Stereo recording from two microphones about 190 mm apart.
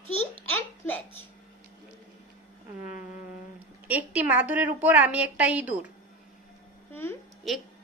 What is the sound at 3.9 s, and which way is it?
A woman's voice, 10° right (ahead or behind).